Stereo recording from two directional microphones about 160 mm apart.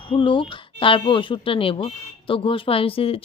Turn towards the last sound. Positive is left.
turn(degrees=35)  # may be behind; listen again after turning